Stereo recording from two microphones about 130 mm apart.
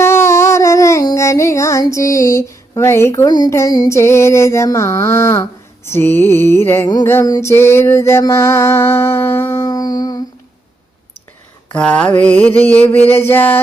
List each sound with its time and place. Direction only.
0.0 s music: 20° left (ahead or behind)
3.2 s a sound: 30° left (ahead or behind)
11.7 s mantra: 10° left (ahead or behind)